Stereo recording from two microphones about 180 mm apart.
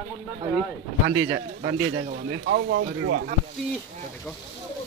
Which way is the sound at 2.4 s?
85° right.